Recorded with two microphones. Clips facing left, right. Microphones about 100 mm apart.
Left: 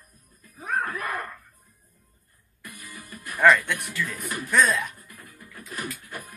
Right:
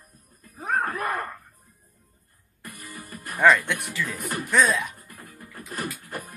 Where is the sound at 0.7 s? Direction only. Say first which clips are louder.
Right 2 dB; 50° right (ahead or behind).